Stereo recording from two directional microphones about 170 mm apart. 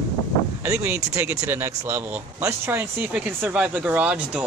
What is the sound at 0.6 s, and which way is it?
Speech, 15° right (ahead or behind).